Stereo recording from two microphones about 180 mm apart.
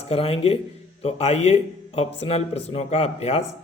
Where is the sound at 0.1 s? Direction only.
35° left (ahead or behind).